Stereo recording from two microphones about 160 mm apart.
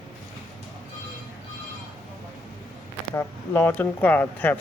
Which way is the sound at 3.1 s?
15° left (ahead or behind).